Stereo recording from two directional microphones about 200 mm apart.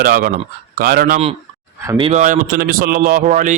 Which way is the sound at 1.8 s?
25° right (ahead or behind).